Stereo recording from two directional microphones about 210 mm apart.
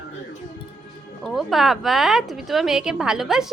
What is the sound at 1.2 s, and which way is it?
A woman's voice, centre (ahead or behind).